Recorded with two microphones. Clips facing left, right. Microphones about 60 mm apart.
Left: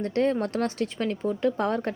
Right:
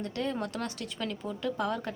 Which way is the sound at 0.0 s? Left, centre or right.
Left.